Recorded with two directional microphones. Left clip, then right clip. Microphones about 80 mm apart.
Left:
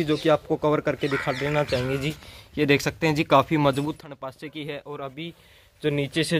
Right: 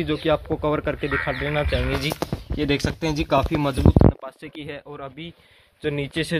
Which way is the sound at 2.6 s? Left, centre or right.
Left.